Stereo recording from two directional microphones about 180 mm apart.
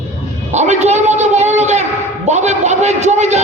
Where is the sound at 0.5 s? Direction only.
40° right (ahead or behind).